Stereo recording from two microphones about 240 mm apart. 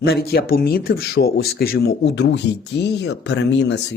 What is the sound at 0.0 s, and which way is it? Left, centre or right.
Speech, left.